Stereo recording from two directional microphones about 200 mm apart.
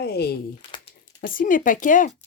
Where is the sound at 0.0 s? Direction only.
55° left (ahead or behind).